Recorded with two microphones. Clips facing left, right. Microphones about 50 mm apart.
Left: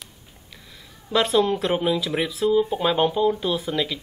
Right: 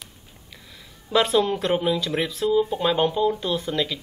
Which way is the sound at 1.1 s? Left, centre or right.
Centre.